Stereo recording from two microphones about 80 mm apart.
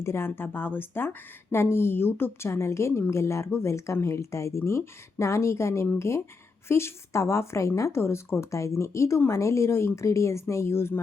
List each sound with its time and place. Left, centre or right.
0.0 s speech: left